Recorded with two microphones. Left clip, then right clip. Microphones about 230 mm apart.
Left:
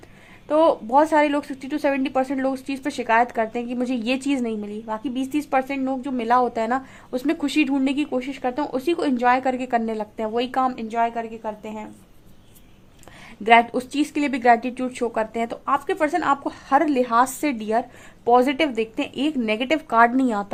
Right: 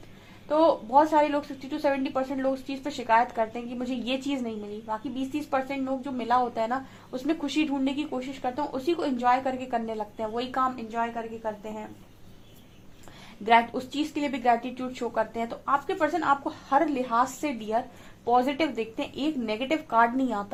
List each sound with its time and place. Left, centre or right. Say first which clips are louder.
0.4 s a woman's voice: left 4 dB; left
13.4 s a woman's voice: left 6 dB; left